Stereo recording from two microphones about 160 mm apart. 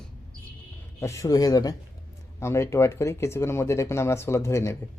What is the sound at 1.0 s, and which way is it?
Speech, 20° left (ahead or behind).